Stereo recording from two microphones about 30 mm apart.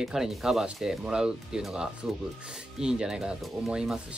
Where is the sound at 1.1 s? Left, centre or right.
Right.